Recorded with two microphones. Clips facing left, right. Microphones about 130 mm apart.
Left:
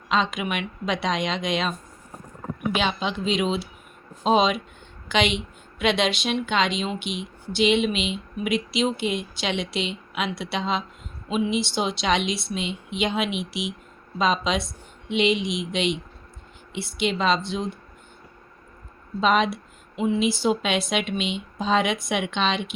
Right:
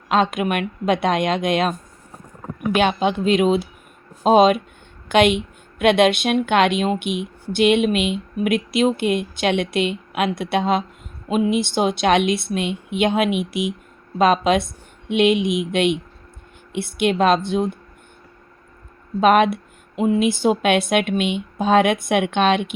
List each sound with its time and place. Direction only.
0.1 s speech: 55° right (ahead or behind)
2.7 s speech: 55° right (ahead or behind)
19.2 s speech: 60° right (ahead or behind)